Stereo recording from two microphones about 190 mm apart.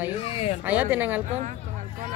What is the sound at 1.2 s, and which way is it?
Speech, 35° right (ahead or behind).